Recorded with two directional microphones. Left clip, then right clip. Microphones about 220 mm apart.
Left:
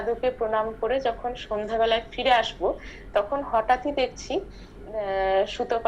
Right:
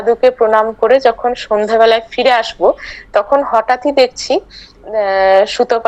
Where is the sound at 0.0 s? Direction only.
50° right (ahead or behind).